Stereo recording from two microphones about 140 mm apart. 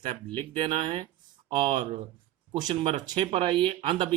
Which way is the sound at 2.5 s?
35° right (ahead or behind).